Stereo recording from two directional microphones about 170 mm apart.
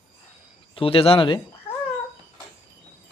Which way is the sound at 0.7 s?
35° left (ahead or behind).